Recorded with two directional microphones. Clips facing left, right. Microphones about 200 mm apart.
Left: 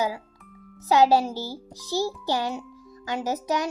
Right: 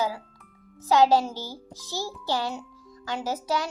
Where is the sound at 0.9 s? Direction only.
15° left (ahead or behind).